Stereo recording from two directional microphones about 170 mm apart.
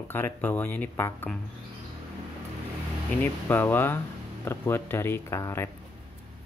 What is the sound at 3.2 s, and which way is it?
Speech, 10° left (ahead or behind).